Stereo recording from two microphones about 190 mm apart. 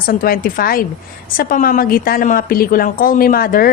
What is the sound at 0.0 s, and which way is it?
A woman's voice, 50° left (ahead or behind).